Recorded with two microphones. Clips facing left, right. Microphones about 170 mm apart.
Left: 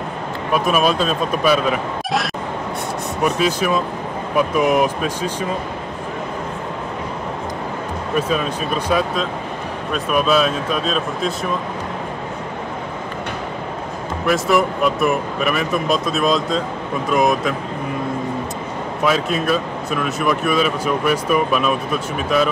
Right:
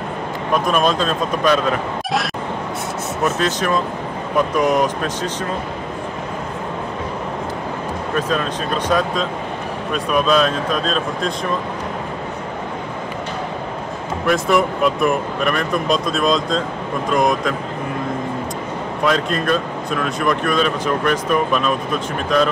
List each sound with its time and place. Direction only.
0.5 s speech: 5° left (ahead or behind)
3.3 s speech: 10° left (ahead or behind)
8.2 s speech: 10° left (ahead or behind)
14.2 s speech: centre (ahead or behind)
19.0 s speech: 5° left (ahead or behind)